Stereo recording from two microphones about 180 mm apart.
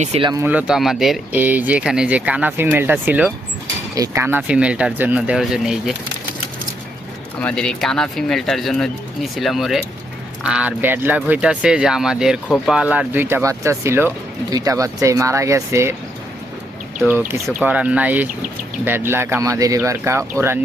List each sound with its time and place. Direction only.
0.0 s speech: 35° right (ahead or behind)
0.4 s speech: 5° right (ahead or behind)
3.9 s speech: 20° right (ahead or behind)
7.3 s speech: 5° left (ahead or behind); by 16.0 s 15° right (ahead or behind)
17.0 s speech: 10° right (ahead or behind)